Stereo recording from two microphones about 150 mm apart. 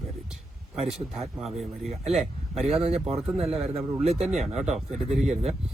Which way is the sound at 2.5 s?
45° right (ahead or behind).